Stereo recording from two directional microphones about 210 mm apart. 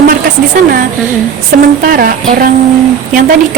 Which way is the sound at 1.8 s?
45° right (ahead or behind).